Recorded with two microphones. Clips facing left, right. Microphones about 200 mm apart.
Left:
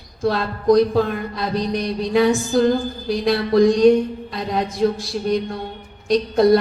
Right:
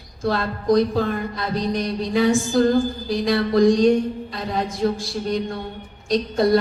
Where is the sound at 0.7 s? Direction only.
60° left (ahead or behind).